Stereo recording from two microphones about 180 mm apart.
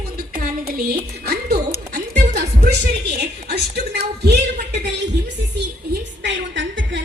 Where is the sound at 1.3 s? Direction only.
60° right (ahead or behind).